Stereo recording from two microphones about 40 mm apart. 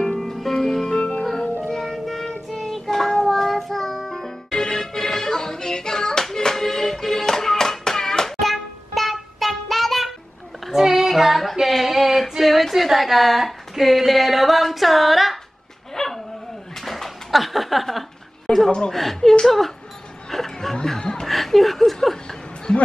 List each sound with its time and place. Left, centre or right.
0.0 s music: centre
1.4 s music: left
1.7 s music: centre
2.4 s child singing: centre
8.4 s a sound: centre
10.6 s female singing: centre
15.9 s dog: centre
16.7 s a sound: centre
18.5 s a woman's voice: left
18.9 s speech: centre
20.2 s music: centre
21.0 s chuckle: centre
21.3 s a sound: centre